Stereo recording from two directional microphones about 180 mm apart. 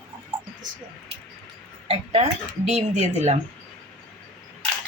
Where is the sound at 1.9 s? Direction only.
30° right (ahead or behind).